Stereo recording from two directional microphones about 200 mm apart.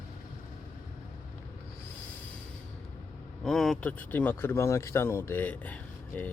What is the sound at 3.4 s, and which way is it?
Speech, centre (ahead or behind).